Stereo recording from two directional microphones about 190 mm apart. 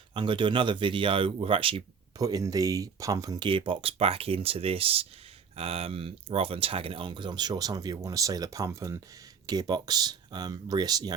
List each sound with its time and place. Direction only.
0.1 s speech: 25° right (ahead or behind)